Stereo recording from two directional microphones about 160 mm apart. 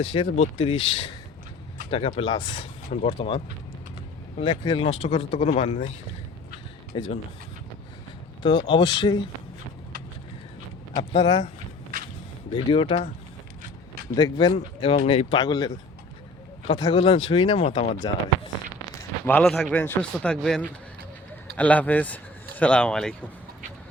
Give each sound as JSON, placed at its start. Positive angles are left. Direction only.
{"t": 0.1, "sound": "speech", "side_deg": 40}
{"t": 2.9, "sound": "speech", "side_deg": 40}
{"t": 6.9, "sound": "speech", "side_deg": 30}
{"t": 8.4, "sound": "speech", "side_deg": 30}
{"t": 11.1, "sound": "speech", "side_deg": 30}
{"t": 12.5, "sound": "speech", "side_deg": 35}
{"t": 14.2, "sound": "speech", "side_deg": 25}
{"t": 18.0, "sound": "speech", "side_deg": 25}
{"t": 19.2, "sound": "speech", "side_deg": 10}